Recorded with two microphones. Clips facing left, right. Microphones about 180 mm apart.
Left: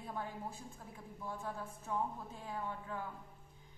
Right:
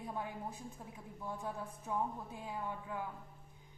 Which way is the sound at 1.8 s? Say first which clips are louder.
Right 1 dB; 15° right (ahead or behind).